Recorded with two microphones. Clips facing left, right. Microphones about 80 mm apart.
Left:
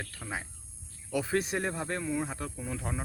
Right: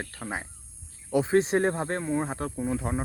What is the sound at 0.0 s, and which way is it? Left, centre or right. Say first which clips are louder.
Speech: right 4 dB; right.